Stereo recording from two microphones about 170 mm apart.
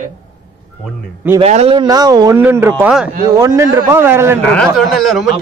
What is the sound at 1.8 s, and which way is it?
Speech, 25° right (ahead or behind).